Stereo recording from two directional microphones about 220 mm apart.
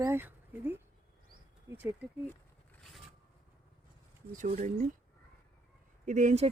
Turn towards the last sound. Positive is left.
turn(degrees=-30)  # may be behind; listen again after turning